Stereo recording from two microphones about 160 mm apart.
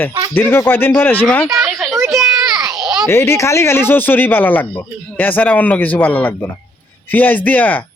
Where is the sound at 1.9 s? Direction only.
20° right (ahead or behind).